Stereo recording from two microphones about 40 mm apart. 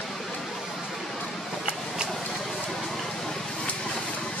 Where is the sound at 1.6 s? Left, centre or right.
Right.